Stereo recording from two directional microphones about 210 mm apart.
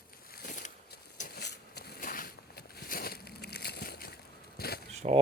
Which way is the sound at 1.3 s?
50° left (ahead or behind).